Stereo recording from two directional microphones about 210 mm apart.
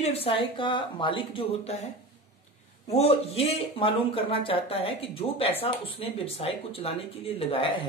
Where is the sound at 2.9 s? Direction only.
30° left (ahead or behind).